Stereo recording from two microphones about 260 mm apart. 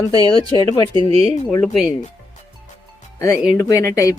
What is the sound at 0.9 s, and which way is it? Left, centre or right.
Speech, right.